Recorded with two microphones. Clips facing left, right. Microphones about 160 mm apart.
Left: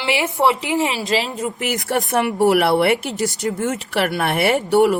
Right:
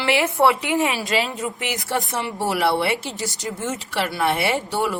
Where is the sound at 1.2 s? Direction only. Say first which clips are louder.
Left 1 dB; 35° left (ahead or behind).